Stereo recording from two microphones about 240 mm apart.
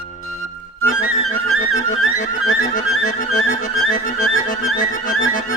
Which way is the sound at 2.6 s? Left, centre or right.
Left.